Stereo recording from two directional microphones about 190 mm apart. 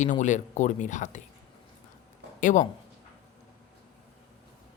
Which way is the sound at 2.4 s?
40° left (ahead or behind).